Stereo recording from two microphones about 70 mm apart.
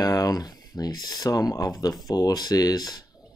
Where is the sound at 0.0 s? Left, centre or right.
Left.